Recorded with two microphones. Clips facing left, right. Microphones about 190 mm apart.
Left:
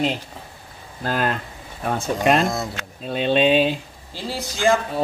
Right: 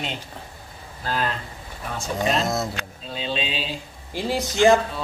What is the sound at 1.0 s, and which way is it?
Speech, 55° left (ahead or behind).